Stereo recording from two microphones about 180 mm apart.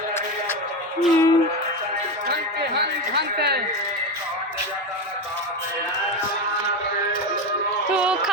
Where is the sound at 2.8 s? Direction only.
65° right (ahead or behind).